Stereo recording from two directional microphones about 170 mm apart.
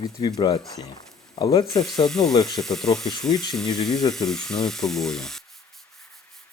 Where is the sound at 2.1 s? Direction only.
5° left (ahead or behind).